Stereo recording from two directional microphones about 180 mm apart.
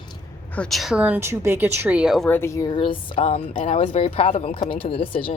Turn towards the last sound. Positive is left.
turn(degrees=30)  # may be behind; listen again after turning